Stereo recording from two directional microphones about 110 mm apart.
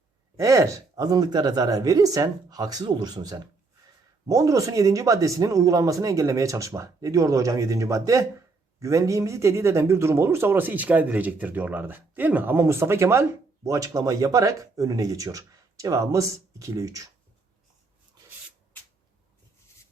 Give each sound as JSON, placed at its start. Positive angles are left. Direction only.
{"t": 0.3, "sound": "speech", "side_deg": -30}